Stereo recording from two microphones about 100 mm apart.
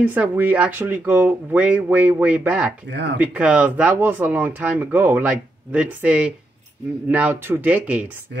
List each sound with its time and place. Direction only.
0.0 s speech: 15° right (ahead or behind)